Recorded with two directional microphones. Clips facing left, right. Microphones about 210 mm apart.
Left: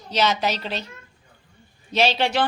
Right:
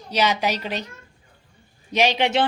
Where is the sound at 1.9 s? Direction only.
15° right (ahead or behind).